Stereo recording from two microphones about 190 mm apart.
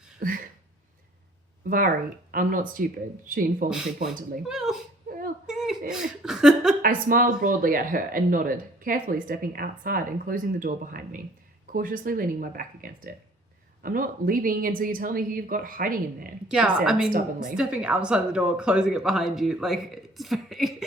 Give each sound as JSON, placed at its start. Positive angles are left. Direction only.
{"t": 0.2, "sound": "a sound", "side_deg": -45}
{"t": 2.3, "sound": "speech", "side_deg": -45}
{"t": 3.7, "sound": "speech", "side_deg": 0}
{"t": 5.5, "sound": "a sound", "side_deg": -5}
{"t": 5.9, "sound": "speech", "side_deg": -5}
{"t": 6.8, "sound": "speech", "side_deg": -45}
{"t": 16.5, "sound": "speech", "side_deg": -5}
{"t": 17.1, "sound": "speech", "side_deg": -45}
{"t": 17.5, "sound": "speech", "side_deg": -5}